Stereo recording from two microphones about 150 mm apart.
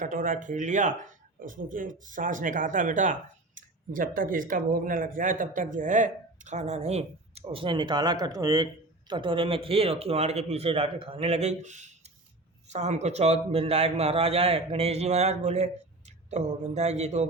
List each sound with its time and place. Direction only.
0.0 s speech: 60° right (ahead or behind)
7.5 s a man's voice: 35° right (ahead or behind)